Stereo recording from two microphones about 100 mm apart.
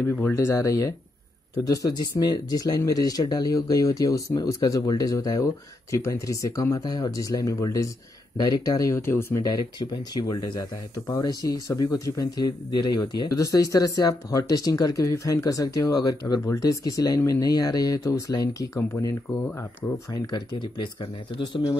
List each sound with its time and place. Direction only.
0.0 s speech: 20° left (ahead or behind)
9.3 s speech: 45° left (ahead or behind); by 19.1 s 30° left (ahead or behind)
20.1 s speech: 45° left (ahead or behind)